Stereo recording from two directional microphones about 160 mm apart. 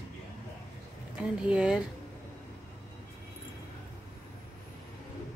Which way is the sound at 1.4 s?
5° right (ahead or behind).